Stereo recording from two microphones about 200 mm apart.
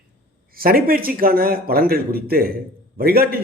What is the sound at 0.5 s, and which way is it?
A man's voice, 45° right (ahead or behind).